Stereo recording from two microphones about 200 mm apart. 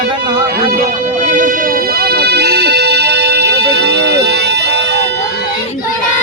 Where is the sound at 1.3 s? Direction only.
45° right (ahead or behind); by 5.0 s 60° right (ahead or behind).